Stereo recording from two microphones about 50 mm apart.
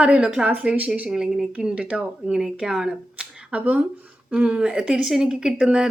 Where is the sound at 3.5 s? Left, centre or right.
Right.